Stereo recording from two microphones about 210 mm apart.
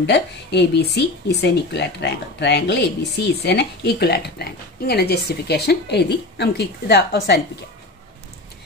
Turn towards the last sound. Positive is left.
turn(degrees=50)  # may be behind; listen again after turning